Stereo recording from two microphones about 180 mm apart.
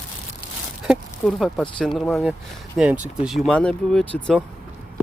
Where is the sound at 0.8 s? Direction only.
Centre (ahead or behind).